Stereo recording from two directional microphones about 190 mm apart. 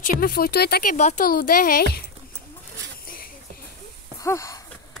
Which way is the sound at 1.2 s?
50° left (ahead or behind).